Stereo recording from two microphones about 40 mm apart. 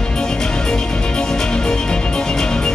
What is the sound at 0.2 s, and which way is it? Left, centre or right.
Music, centre.